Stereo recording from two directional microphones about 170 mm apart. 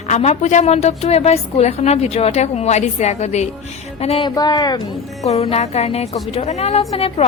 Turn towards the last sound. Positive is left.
turn(degrees=35)  # may be behind; listen again after turning